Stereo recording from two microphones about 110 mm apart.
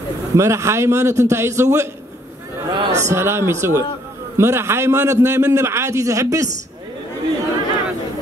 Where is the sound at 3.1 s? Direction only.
25° right (ahead or behind).